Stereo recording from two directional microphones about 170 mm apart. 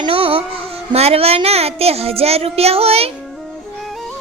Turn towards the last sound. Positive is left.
turn(degrees=-35)  # may be behind; listen again after turning